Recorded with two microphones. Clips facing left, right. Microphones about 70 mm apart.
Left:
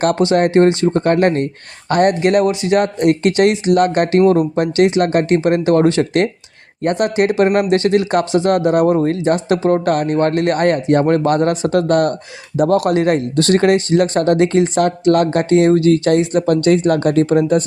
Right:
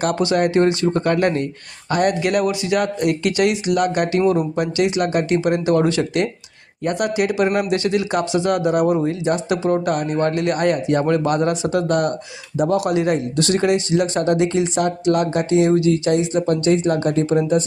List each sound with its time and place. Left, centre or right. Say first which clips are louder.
0.2 s speech: left 4 dB; left